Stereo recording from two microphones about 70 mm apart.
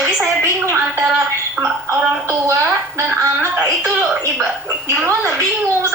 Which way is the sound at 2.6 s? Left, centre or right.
Right.